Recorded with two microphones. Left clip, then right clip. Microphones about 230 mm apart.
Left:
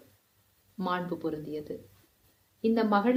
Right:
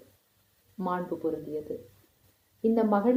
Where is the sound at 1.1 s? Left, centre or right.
Centre.